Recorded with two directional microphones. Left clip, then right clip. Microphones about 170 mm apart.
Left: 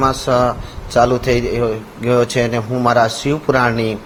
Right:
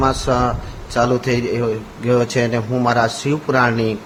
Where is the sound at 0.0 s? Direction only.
15° left (ahead or behind).